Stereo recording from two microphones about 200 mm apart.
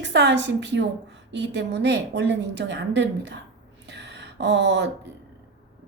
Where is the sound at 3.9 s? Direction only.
60° right (ahead or behind).